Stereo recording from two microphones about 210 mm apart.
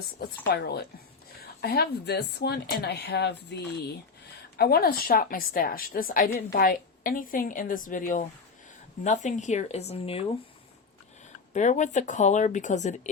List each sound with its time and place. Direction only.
0.5 s a woman's voice: 50° left (ahead or behind); by 10.2 s 30° left (ahead or behind)
11.5 s speech: 35° left (ahead or behind)